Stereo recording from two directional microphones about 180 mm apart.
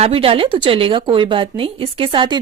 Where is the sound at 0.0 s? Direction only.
30° right (ahead or behind).